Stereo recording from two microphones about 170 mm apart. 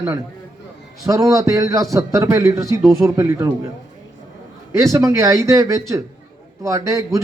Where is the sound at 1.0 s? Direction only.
20° right (ahead or behind).